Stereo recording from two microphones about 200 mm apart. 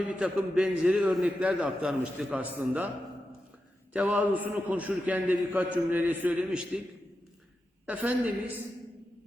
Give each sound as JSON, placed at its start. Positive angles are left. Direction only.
{"t": 0.1, "sound": "a man's voice", "side_deg": -5}
{"t": 3.9, "sound": "a man's voice", "side_deg": -10}
{"t": 7.9, "sound": "a man's voice", "side_deg": -5}